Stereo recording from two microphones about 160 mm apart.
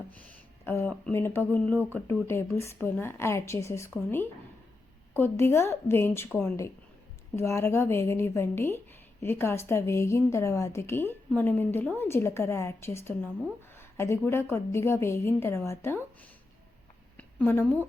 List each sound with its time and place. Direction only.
0.1 s a sound: 10° left (ahead or behind)
1.0 s a woman's voice: 15° left (ahead or behind)
17.2 s a woman's voice: 15° left (ahead or behind)